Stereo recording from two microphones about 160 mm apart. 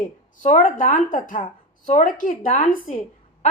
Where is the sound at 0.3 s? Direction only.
55° left (ahead or behind).